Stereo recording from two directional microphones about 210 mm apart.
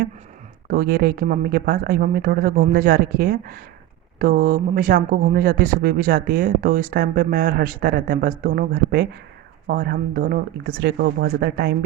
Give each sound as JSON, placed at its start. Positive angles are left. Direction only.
{"t": 0.7, "sound": "speech", "side_deg": -45}